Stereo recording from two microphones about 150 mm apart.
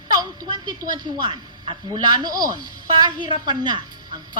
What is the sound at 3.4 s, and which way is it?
Speech, 30° right (ahead or behind).